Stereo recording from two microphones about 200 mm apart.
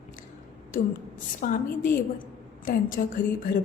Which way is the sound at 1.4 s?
45° left (ahead or behind).